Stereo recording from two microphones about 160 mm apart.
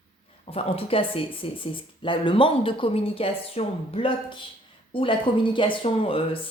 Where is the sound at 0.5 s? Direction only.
40° left (ahead or behind).